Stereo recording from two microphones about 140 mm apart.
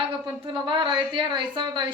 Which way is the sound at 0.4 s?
35° right (ahead or behind).